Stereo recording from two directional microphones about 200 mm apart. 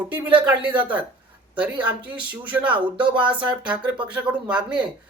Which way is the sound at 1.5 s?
5° right (ahead or behind).